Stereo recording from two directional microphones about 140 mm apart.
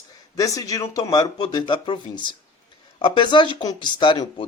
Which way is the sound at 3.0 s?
35° left (ahead or behind).